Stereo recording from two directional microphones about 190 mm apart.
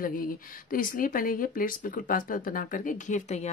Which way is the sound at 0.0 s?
50° left (ahead or behind).